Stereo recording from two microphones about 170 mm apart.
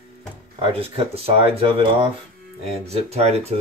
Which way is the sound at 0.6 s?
35° right (ahead or behind).